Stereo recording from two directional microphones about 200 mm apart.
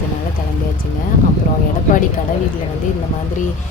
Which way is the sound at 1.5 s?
45° left (ahead or behind).